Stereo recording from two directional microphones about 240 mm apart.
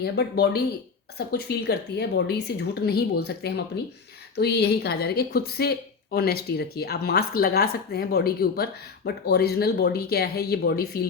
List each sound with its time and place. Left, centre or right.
0.0 s a woman's voice: left